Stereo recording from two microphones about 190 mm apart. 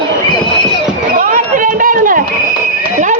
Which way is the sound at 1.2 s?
45° right (ahead or behind).